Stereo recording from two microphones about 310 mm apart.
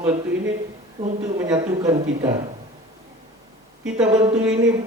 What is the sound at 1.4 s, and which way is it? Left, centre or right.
Speech, centre.